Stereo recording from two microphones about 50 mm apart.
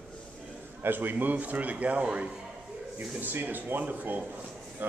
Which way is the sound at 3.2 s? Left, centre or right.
Right.